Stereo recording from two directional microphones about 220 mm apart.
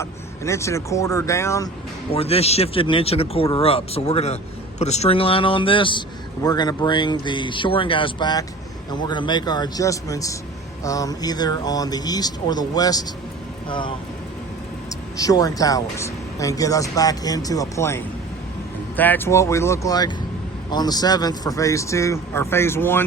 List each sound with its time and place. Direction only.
0.0 s speech: 15° left (ahead or behind)
2.0 s a man's voice: 25° left (ahead or behind)
15.2 s speech: 15° left (ahead or behind)